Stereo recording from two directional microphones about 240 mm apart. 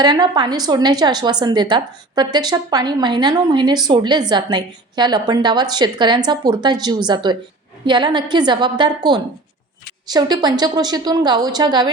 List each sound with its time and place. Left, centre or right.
0.0 s a woman's voice: centre